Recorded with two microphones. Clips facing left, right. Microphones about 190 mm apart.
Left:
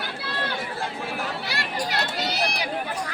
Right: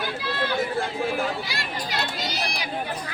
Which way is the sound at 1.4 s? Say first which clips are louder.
Left 3 dB; 65° left (ahead or behind).